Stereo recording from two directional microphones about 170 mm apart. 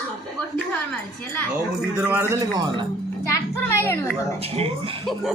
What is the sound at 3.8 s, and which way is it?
Speech, 10° left (ahead or behind).